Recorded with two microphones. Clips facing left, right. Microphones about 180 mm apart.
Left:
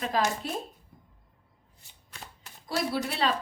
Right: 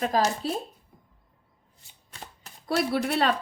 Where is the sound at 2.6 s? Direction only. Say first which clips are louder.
Right 4 dB; 60° right (ahead or behind).